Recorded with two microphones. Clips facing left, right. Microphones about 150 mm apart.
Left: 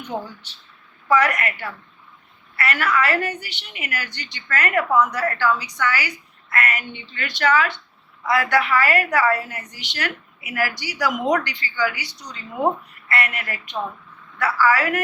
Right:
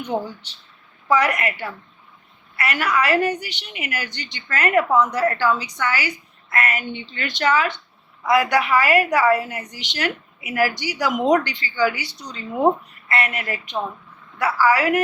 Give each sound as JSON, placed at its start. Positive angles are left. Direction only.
{"t": 1.1, "sound": "a woman's voice", "side_deg": -20}